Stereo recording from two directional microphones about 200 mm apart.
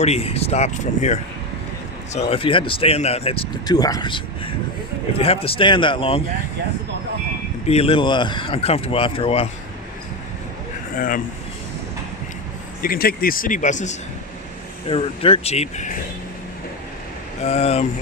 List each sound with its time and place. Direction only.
0.0 s speech: 30° left (ahead or behind)
7.7 s speech: 30° left (ahead or behind)
10.9 s speech: 45° left (ahead or behind)
12.8 s speech: 45° left (ahead or behind)
14.8 s speech: 30° left (ahead or behind)
17.4 s speech: 30° left (ahead or behind)